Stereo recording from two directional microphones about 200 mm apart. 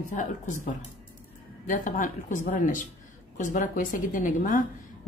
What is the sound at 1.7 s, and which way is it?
A woman's voice, 40° left (ahead or behind).